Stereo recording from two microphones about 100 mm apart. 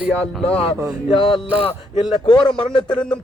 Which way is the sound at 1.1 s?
55° left (ahead or behind).